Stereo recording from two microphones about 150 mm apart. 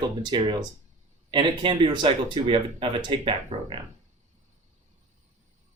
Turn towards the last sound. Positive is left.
turn(degrees=-35)  # may be behind; listen again after turning